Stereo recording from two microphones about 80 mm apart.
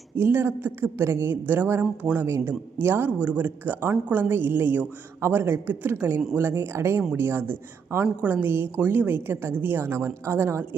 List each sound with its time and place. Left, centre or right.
0.2 s speech: right